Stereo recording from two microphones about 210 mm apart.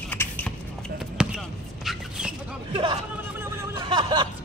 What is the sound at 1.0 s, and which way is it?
Basketball bounce, centre (ahead or behind).